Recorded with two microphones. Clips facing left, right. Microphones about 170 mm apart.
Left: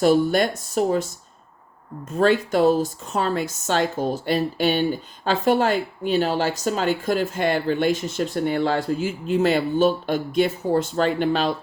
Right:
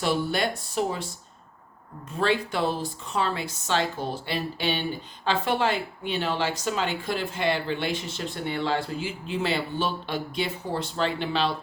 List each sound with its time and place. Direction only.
0.0 s a woman's voice: 45° left (ahead or behind)
2.1 s a woman's voice: 45° left (ahead or behind)